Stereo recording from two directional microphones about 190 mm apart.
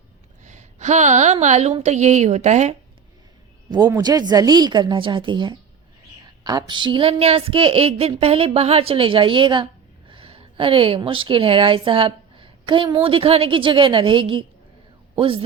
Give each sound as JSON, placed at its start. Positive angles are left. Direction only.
{"t": 0.4, "sound": "a woman's voice", "side_deg": -40}
{"t": 3.7, "sound": "a woman's voice", "side_deg": -20}